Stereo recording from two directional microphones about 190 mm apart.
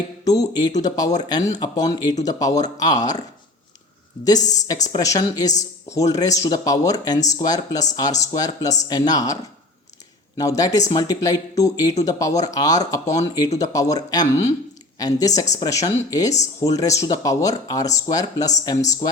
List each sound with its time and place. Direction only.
0.3 s speech: 20° left (ahead or behind)
4.4 s speech: 40° left (ahead or behind)
4.9 s a woman's voice: 20° left (ahead or behind)